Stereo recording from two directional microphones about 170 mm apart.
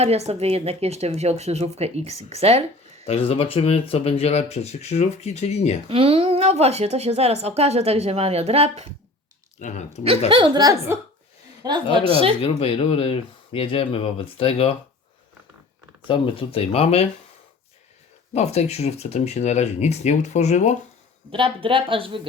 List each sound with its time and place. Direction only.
0.0 s a woman's voice: 40° right (ahead or behind)
3.1 s speech: 35° left (ahead or behind)
5.9 s a woman's voice: 35° right (ahead or behind)
9.6 s speech: 45° left (ahead or behind)
10.2 s a woman's voice: 30° right (ahead or behind)
12.4 s speech: 35° left (ahead or behind)
16.0 s speech: 30° left (ahead or behind)
18.3 s speech: 40° left (ahead or behind)
21.3 s a woman's voice: 30° right (ahead or behind)